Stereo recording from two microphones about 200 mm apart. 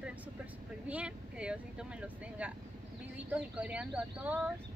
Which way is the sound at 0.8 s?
5° right (ahead or behind).